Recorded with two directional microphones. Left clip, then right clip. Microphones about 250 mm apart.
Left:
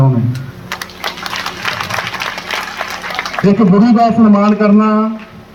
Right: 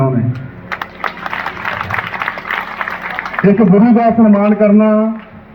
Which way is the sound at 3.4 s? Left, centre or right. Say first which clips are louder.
Right 1 dB; left.